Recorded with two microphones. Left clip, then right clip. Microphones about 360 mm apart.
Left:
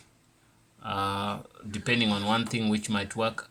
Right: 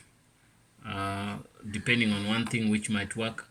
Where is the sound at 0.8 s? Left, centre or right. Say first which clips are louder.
Left 5 dB; left.